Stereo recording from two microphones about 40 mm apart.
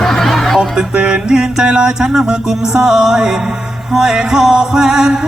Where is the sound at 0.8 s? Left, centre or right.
Right.